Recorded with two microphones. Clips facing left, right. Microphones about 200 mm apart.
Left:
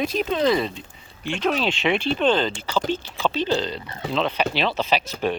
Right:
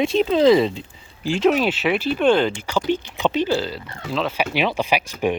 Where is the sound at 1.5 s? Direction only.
5° right (ahead or behind).